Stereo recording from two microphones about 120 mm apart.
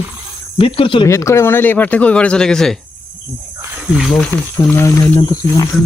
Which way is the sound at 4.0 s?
Centre (ahead or behind).